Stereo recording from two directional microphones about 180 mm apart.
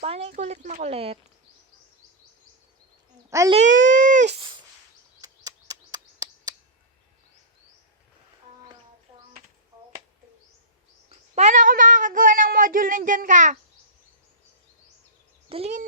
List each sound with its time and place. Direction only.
0.0 s speech: 35° right (ahead or behind)
3.2 s a child's voice: 15° right (ahead or behind)
3.5 s speech: 45° right (ahead or behind)
5.2 s a sound: 20° right (ahead or behind)
11.3 s speech: 40° right (ahead or behind)
15.4 s a child's voice: 35° right (ahead or behind)